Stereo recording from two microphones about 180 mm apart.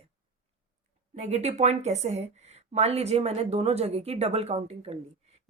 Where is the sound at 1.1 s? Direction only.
40° right (ahead or behind).